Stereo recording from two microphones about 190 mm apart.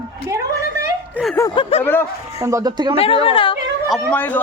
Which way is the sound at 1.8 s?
10° left (ahead or behind).